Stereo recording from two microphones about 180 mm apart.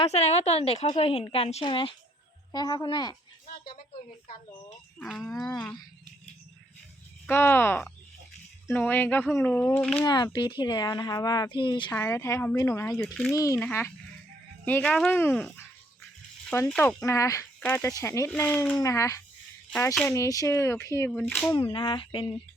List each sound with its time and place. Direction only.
0.0 s a woman's voice: 35° left (ahead or behind)
4.9 s speech: 5° left (ahead or behind)
7.3 s speech: 10° left (ahead or behind)
10.0 s speech: 20° left (ahead or behind)
11.9 s speech: 15° left (ahead or behind)
17.0 s speech: 15° left (ahead or behind)
21.2 s speech: 5° left (ahead or behind)
21.5 s speech: 25° left (ahead or behind)